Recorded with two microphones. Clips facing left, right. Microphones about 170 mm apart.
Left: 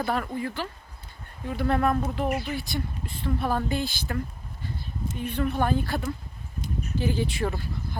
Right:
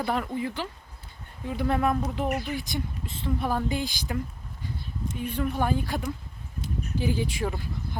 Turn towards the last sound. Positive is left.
turn(degrees=-10)  # may be behind; listen again after turning